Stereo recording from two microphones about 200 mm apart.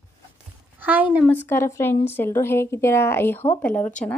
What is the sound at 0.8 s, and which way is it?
Speech, 10° right (ahead or behind).